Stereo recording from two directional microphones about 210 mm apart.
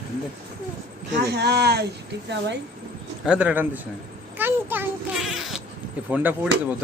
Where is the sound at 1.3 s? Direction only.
50° right (ahead or behind).